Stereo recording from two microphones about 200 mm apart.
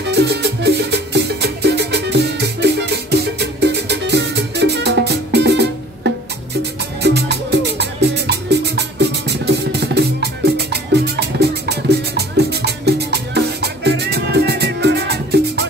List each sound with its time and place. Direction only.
0.0 s music: 55° right (ahead or behind)